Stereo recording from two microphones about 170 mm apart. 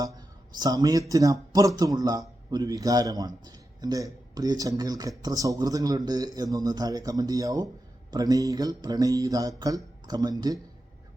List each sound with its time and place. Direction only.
0.6 s speech: 20° right (ahead or behind)